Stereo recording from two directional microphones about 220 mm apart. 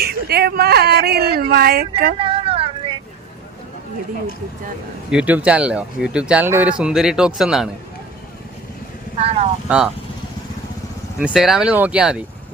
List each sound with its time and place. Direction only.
0.0 s speech: 45° right (ahead or behind)
2.1 s a sound: 25° right (ahead or behind)
5.1 s speech: 5° right (ahead or behind)
9.1 s vehicle: 30° right (ahead or behind)
9.6 s speech: 5° right (ahead or behind)
11.2 s speech: 5° right (ahead or behind)